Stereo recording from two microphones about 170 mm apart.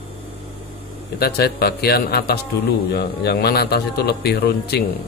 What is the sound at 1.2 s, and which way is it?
A man's voice, 70° left (ahead or behind).